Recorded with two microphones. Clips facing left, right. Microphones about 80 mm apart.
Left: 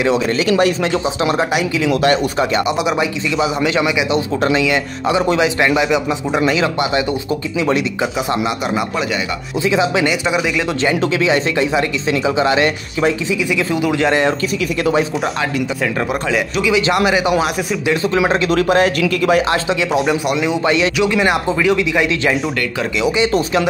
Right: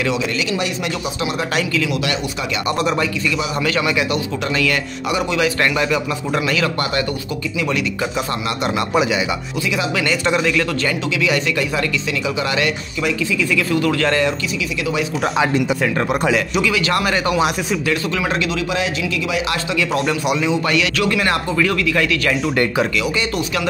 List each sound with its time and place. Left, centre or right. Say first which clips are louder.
0.0 s a man's voice: left 5 dB; left
1.5 s a man's voice: left 2 dB; centre
1.9 s speech: left 7 dB; left
5.0 s a man's voice: left 4 dB; left
9.6 s speech: left 7 dB; left
10.2 s a man's voice: even; centre
15.8 s speech: right 1 dB; centre
16.8 s a man's voice: left 3 dB; centre
18.5 s a man's voice: left 7 dB; left
19.5 s speech: left 4 dB; left
20.3 s a man's voice: left 2 dB; centre
23.3 s speech: left 5 dB; left